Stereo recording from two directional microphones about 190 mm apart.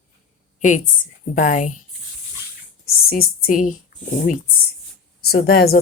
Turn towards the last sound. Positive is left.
turn(degrees=55)  # may be behind; listen again after turning